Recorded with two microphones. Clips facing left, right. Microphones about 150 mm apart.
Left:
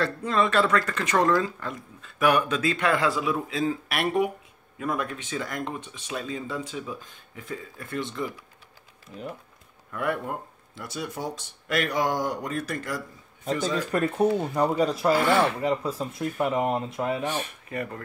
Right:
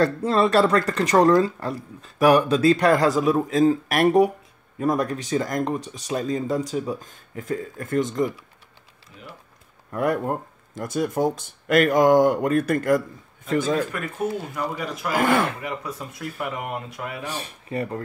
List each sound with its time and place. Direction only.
0.0 s speech: 35° right (ahead or behind)
9.8 s speech: 40° right (ahead or behind)
13.9 s speech: 35° left (ahead or behind)
15.1 s speech: 50° right (ahead or behind)
15.6 s speech: 30° left (ahead or behind)
17.3 s speech: 35° right (ahead or behind)